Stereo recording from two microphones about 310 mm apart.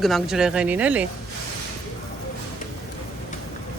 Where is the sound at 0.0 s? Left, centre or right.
Centre.